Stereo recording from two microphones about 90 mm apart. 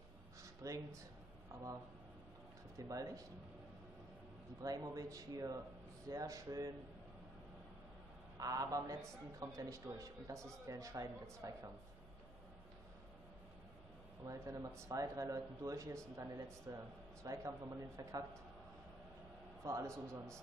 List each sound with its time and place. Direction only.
0.4 s a sound: 40° right (ahead or behind)
2.8 s speech: 40° right (ahead or behind)
4.6 s speech: 40° right (ahead or behind)
8.4 s speech: 40° right (ahead or behind)
14.2 s speech: 35° right (ahead or behind)
19.6 s a man's voice: 35° right (ahead or behind)